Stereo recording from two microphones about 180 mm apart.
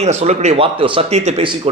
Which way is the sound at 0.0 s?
35° right (ahead or behind).